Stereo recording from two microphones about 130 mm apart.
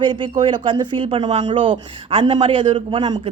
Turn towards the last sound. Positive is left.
turn(degrees=-40)  # may be behind; listen again after turning